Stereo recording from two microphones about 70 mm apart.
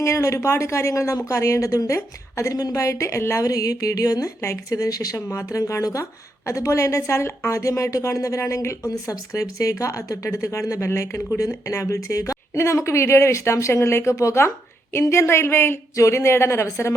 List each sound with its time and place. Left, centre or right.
0.0 s a woman's voice: left
2.8 s a woman's voice: left
3.4 s music: left
4.4 s a woman's voice: left
8.9 s a woman's voice: left